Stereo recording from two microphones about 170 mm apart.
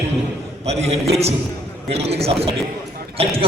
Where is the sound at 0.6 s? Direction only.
40° right (ahead or behind).